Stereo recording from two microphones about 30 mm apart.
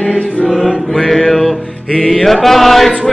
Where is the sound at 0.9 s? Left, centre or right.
Centre.